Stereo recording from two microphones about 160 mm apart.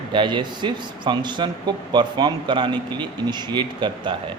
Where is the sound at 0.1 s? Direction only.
30° right (ahead or behind).